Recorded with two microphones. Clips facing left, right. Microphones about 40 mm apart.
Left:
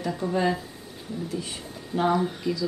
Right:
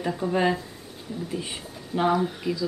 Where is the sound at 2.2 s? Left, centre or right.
Centre.